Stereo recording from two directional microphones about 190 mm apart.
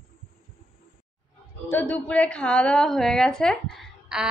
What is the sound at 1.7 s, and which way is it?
A woman's voice, 10° left (ahead or behind).